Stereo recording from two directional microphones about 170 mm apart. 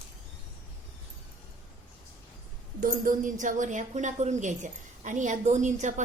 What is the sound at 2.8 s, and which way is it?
A woman's voice, 50° right (ahead or behind).